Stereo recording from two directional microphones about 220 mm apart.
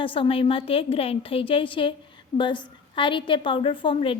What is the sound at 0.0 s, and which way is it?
A woman's voice, 25° left (ahead or behind).